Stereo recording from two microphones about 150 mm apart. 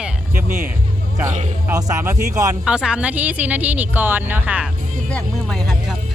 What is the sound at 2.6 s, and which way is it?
Speech, 5° right (ahead or behind).